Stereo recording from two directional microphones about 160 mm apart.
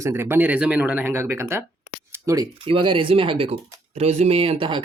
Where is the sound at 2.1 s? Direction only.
20° right (ahead or behind).